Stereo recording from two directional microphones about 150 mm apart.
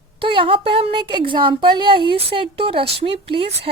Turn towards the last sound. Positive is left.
turn(degrees=-40)  # may be behind; listen again after turning